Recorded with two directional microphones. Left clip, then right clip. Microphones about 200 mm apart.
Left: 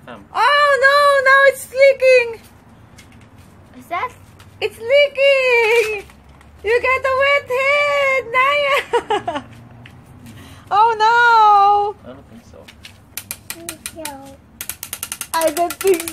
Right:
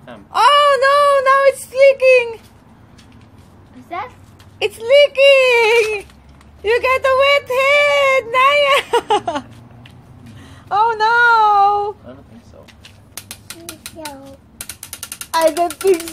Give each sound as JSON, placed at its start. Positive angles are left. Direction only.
{"t": 0.3, "sound": "child singing", "side_deg": -20}
{"t": 4.6, "sound": "speech", "side_deg": -35}
{"t": 10.4, "sound": "a sound", "side_deg": 5}